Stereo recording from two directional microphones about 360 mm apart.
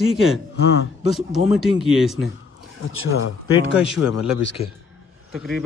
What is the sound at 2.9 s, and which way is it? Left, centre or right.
Speech, left.